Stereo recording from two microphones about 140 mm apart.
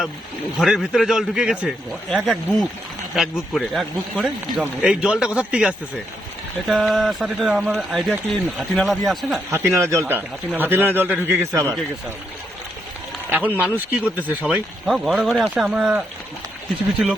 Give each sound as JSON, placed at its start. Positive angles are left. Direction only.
{"t": 0.6, "sound": "a man's voice", "side_deg": -5}
{"t": 9.5, "sound": "a man's voice", "side_deg": -20}
{"t": 13.3, "sound": "a man's voice", "side_deg": -10}